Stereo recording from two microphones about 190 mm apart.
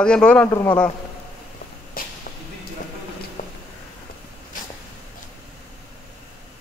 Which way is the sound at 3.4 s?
40° left (ahead or behind).